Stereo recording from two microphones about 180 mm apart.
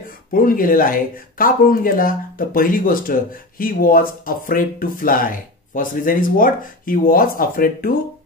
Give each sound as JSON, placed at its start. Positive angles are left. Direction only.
{"t": 0.3, "sound": "speech", "side_deg": 50}